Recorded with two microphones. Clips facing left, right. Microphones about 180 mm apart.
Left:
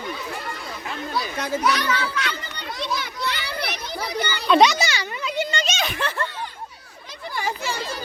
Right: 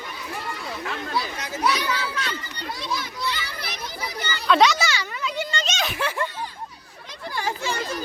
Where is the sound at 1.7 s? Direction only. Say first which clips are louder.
Left 2 dB; 70° left (ahead or behind).